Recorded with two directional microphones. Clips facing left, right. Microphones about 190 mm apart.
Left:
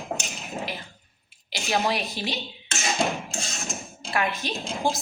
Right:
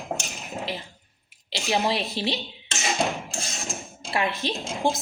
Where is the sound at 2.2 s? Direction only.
30° right (ahead or behind).